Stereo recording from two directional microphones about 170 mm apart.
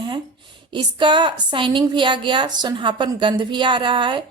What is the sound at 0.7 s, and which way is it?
A woman's voice, 30° right (ahead or behind).